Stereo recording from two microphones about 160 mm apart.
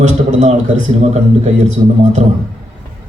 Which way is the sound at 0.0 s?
50° right (ahead or behind).